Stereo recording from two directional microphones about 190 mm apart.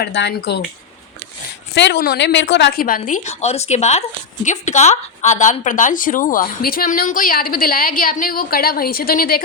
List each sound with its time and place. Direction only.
0.0 s a woman's voice: 65° left (ahead or behind)
1.7 s a woman's voice: 60° left (ahead or behind)
2.8 s a woman's voice: 45° left (ahead or behind)